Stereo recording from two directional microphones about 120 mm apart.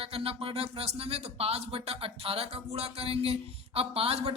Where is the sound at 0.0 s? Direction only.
50° right (ahead or behind).